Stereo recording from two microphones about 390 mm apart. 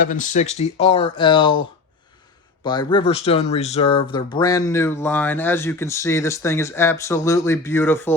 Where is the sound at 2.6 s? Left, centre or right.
Centre.